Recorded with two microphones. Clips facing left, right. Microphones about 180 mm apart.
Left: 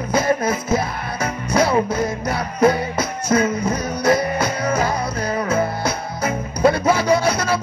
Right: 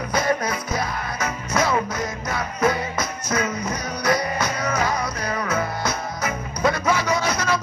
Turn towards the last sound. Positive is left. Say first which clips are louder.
# left 5 dB
turn(degrees=30)  # may be behind; listen again after turning